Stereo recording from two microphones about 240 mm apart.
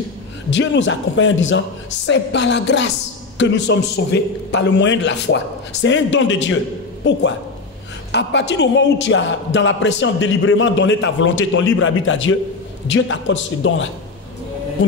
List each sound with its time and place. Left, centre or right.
0.5 s a man's voice: left